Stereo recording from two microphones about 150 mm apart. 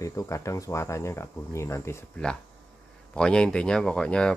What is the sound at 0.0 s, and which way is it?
Speech, 20° left (ahead or behind).